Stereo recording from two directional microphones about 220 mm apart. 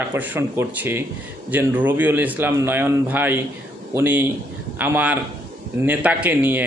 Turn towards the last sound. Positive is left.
turn(degrees=-5)  # may be behind; listen again after turning